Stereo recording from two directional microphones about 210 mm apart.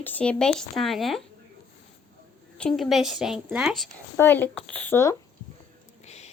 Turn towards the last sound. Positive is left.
turn(degrees=30)  # may be behind; listen again after turning